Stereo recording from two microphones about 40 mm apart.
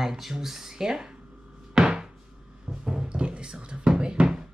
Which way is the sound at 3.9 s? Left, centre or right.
Right.